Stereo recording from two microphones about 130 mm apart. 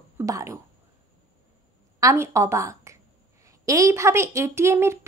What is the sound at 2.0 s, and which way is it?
A woman's voice, 25° right (ahead or behind).